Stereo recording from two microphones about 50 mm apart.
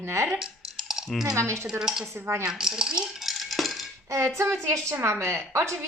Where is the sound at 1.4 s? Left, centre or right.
Right.